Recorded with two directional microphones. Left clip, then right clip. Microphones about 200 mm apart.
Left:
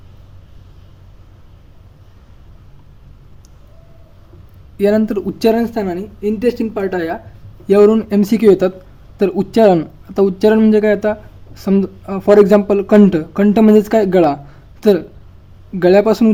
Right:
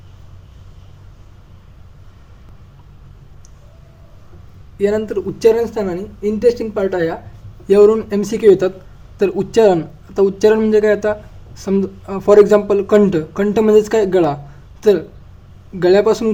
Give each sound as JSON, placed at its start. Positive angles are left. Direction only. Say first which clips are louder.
{"t": 4.8, "sound": "speech", "louder": "left 2 dB", "side_deg": 40}